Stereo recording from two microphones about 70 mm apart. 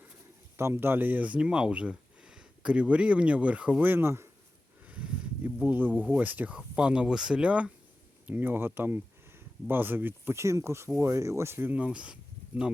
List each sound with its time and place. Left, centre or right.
0.5 s speech: right
4.9 s a sound: centre
5.4 s speech: right
6.6 s speech: centre
8.3 s speech: right
10.3 s speech: right
11.8 s speech: centre